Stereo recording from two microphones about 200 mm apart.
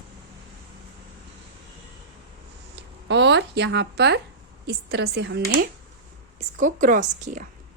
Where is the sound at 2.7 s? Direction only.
60° right (ahead or behind).